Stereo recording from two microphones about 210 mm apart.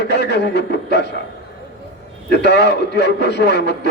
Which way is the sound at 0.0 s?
50° left (ahead or behind).